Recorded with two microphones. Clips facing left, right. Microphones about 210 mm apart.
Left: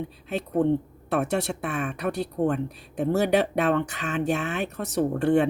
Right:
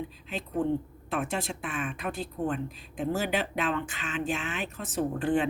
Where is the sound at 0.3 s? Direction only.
65° left (ahead or behind).